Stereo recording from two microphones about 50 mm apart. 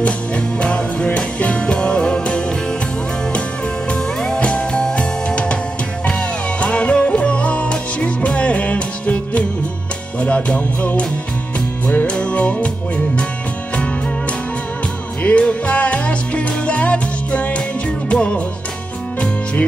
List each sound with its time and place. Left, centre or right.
0.6 s music: left
3.9 s music: centre
15.2 s music: left